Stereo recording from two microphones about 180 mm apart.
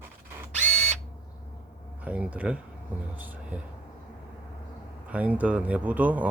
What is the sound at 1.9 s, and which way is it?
Speech, 5° right (ahead or behind).